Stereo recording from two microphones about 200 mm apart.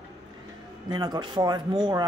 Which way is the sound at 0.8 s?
20° right (ahead or behind).